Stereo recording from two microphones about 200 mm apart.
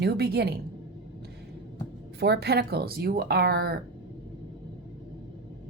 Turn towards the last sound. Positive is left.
turn(degrees=-50)  # may be behind; listen again after turning